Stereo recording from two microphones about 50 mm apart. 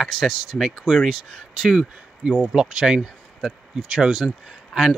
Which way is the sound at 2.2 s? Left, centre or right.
Right.